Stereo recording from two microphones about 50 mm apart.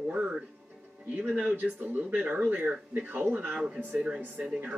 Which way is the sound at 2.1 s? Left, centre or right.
Right.